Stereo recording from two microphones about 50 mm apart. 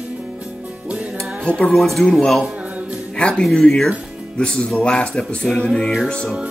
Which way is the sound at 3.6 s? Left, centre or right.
Centre.